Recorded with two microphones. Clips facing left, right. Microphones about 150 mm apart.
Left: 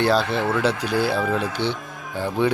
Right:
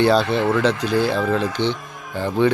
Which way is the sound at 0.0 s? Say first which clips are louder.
Right 3 dB; centre (ahead or behind).